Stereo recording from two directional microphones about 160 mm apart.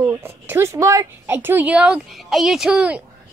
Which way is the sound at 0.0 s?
15° right (ahead or behind).